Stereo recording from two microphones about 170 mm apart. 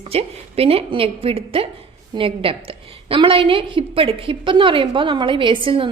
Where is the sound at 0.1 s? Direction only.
35° right (ahead or behind).